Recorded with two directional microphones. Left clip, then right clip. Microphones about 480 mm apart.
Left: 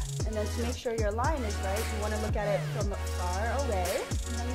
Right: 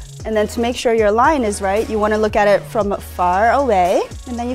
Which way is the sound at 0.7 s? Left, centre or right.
Right.